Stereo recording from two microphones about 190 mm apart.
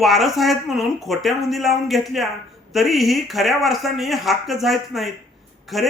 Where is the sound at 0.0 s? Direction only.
Centre (ahead or behind).